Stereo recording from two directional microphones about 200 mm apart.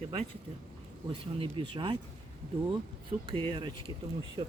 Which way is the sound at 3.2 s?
25° right (ahead or behind).